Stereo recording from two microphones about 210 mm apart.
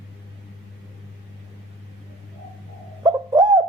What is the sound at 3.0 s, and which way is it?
Bird, 20° right (ahead or behind).